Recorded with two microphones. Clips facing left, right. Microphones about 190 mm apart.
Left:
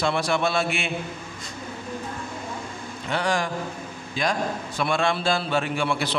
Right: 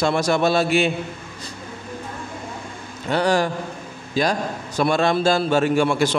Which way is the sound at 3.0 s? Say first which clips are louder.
Right 6 dB; 35° right (ahead or behind).